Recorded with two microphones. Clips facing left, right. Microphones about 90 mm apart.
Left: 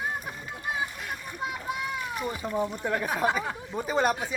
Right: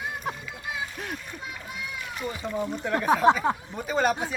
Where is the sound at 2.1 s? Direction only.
15° left (ahead or behind).